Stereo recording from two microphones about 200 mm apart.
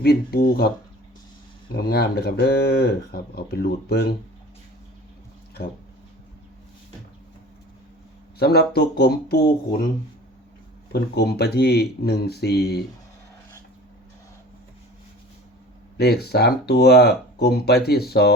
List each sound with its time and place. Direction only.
0.0 s speech: 50° left (ahead or behind)
1.7 s speech: 50° left (ahead or behind)
8.4 s speech: 55° left (ahead or behind)
10.9 s speech: 55° left (ahead or behind)
16.0 s speech: 55° left (ahead or behind)